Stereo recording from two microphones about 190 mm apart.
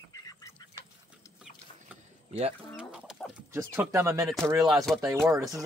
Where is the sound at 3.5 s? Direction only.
10° right (ahead or behind).